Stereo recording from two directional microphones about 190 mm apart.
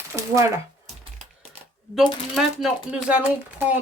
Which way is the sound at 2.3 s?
Centre (ahead or behind).